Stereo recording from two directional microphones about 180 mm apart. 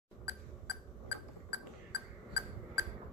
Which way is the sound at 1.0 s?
65° left (ahead or behind).